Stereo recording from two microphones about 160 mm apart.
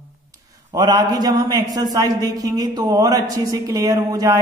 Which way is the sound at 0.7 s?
25° right (ahead or behind).